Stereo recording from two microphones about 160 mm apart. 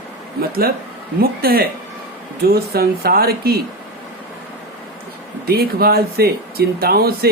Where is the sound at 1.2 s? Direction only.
70° right (ahead or behind).